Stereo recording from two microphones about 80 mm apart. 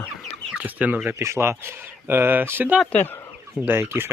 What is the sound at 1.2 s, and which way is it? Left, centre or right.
Speech, right.